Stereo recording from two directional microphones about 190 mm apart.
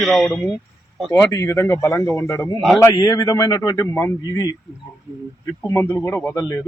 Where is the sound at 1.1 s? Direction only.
15° left (ahead or behind).